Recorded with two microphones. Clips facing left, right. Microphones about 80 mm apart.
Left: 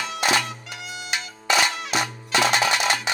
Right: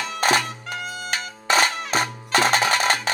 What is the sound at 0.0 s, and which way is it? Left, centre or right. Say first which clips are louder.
Music: right 2 dB; right.